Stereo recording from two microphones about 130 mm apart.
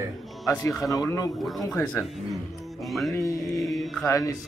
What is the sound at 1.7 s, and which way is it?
Speech, 20° left (ahead or behind).